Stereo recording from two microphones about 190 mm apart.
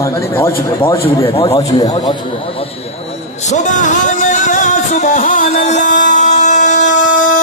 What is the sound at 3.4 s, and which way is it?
Music, 40° left (ahead or behind).